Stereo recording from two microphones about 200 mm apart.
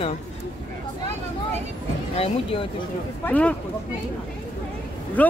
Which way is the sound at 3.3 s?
5° left (ahead or behind).